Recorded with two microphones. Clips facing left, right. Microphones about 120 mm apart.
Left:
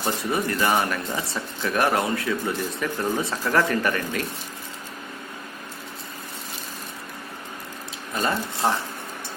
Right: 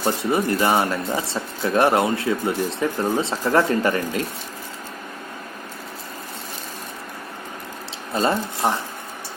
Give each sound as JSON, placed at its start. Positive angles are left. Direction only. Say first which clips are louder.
{"t": 0.0, "sound": "speech", "louder": "right 4 dB", "side_deg": -25}
{"t": 8.1, "sound": "speech", "louder": "right 4 dB", "side_deg": -25}